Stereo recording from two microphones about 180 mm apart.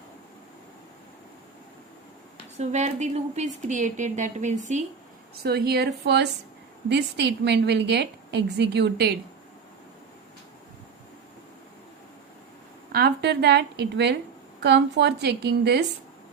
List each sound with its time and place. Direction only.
2.6 s a woman's voice: 40° right (ahead or behind)
5.3 s a woman's voice: 60° right (ahead or behind)
12.9 s a woman's voice: 60° right (ahead or behind)